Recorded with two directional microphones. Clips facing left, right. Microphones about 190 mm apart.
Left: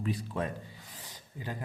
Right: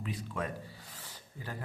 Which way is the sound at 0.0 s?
35° left (ahead or behind).